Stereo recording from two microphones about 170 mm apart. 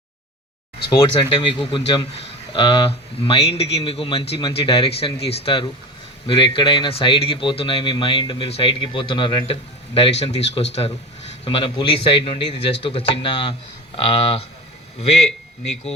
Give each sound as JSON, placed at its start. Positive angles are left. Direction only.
{"t": 0.9, "sound": "speech", "side_deg": 30}
{"t": 11.4, "sound": "speech", "side_deg": 30}